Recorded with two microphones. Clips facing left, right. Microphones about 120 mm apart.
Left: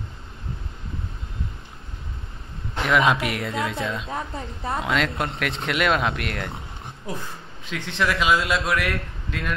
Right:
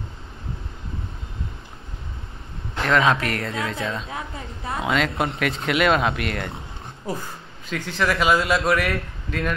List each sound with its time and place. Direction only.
2.8 s speech: 5° left (ahead or behind)